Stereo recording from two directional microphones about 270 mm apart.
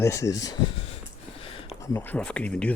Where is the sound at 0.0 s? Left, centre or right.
Centre.